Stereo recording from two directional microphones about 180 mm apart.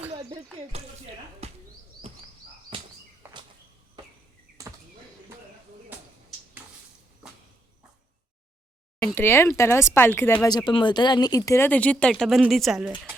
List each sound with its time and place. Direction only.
0.1 s a sound: 25° right (ahead or behind)
1.4 s bird: 35° right (ahead or behind)
9.1 s speech: 15° left (ahead or behind)